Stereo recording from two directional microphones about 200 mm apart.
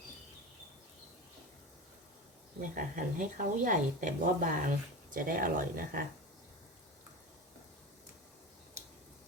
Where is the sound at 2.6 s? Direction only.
40° right (ahead or behind).